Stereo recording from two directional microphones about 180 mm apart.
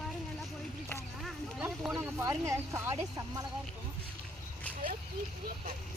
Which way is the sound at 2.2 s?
15° right (ahead or behind).